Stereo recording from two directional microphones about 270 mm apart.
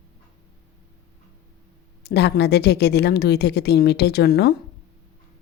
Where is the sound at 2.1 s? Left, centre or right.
Left.